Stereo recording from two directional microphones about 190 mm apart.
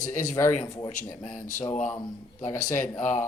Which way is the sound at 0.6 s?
15° left (ahead or behind).